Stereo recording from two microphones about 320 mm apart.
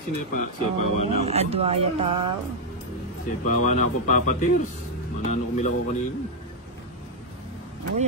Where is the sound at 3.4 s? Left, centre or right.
Left.